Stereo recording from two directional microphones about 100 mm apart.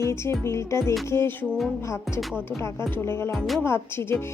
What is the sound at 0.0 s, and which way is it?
Speech, 30° left (ahead or behind).